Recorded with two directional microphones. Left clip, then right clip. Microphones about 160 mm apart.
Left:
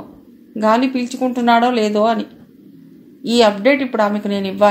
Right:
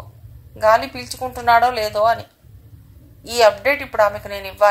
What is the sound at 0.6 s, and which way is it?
A woman's voice, 40° right (ahead or behind).